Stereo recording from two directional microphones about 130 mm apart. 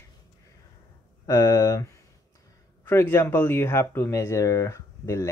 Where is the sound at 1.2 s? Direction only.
25° left (ahead or behind).